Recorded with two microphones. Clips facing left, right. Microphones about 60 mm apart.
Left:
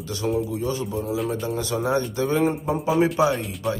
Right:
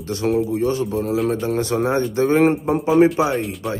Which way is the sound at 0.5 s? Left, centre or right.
Right.